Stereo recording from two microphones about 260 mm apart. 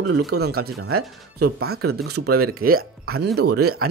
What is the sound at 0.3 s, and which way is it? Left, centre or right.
Speech, right.